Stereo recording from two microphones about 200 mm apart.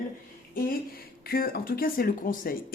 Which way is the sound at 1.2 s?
45° left (ahead or behind).